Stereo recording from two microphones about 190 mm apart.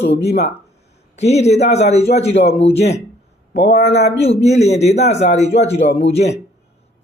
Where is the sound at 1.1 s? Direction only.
35° left (ahead or behind).